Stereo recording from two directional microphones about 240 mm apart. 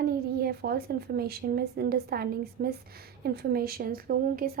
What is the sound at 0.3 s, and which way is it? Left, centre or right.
A woman's voice, right.